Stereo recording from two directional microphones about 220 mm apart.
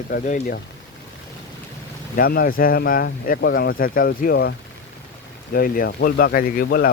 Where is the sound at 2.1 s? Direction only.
40° left (ahead or behind).